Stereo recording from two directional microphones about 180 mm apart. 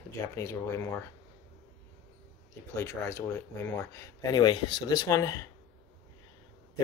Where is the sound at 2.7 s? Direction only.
15° left (ahead or behind).